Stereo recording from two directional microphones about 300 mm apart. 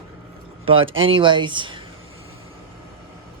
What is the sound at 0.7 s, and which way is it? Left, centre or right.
Speech, right.